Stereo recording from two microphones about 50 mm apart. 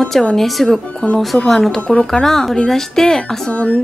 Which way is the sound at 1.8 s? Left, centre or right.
Centre.